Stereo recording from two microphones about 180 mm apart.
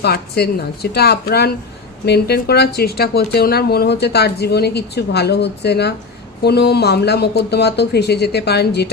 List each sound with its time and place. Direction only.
0.0 s speech: 60° left (ahead or behind)